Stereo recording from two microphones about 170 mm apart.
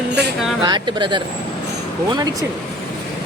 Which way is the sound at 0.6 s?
25° right (ahead or behind).